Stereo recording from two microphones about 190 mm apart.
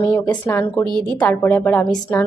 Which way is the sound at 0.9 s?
25° right (ahead or behind).